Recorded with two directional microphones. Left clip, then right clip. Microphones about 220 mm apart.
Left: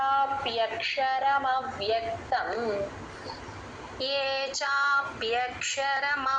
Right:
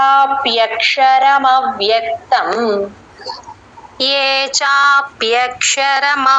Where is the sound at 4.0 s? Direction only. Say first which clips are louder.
Right 15 dB; 40° right (ahead or behind).